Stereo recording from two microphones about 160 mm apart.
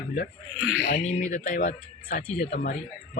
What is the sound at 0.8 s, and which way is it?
A woman's voice, 50° left (ahead or behind).